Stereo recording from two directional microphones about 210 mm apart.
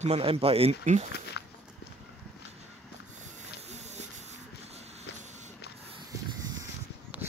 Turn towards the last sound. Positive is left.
turn(degrees=-10)  # may be behind; listen again after turning